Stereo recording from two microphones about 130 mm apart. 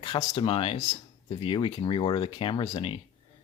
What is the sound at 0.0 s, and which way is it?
Speech, 55° left (ahead or behind).